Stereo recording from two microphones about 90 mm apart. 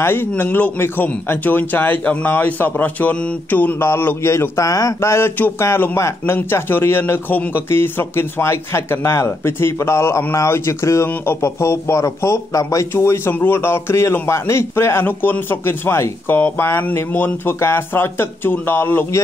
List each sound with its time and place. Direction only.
0.0 s a man's voice: 25° left (ahead or behind)